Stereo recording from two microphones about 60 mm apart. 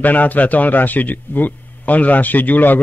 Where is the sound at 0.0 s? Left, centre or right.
Left.